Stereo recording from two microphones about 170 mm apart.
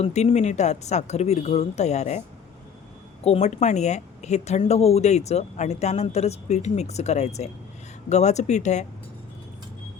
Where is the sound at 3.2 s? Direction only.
40° left (ahead or behind).